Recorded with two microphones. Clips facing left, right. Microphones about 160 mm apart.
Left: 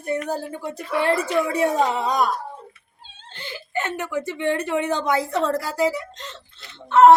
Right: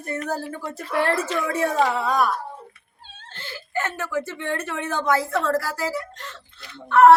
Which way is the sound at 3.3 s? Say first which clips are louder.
Left 1 dB; 15° left (ahead or behind).